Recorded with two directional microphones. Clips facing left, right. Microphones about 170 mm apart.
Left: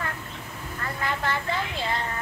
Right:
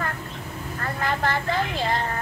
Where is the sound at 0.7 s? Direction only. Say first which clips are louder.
Right 3 dB; 45° right (ahead or behind).